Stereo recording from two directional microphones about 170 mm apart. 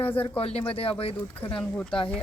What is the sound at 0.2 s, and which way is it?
Speech, 35° left (ahead or behind).